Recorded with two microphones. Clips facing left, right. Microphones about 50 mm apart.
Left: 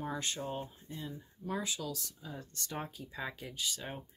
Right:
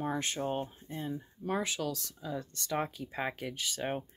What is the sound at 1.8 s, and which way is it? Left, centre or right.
Speech, right.